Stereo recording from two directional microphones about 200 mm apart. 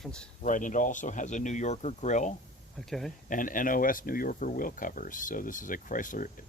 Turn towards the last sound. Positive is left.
turn(degrees=40)  # may be behind; listen again after turning